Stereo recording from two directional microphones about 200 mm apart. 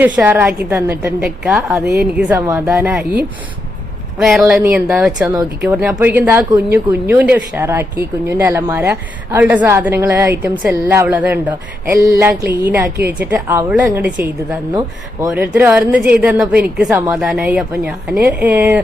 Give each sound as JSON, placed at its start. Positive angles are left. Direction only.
{"t": 0.0, "sound": "a woman's voice", "side_deg": -10}
{"t": 15.3, "sound": "a woman's voice", "side_deg": -5}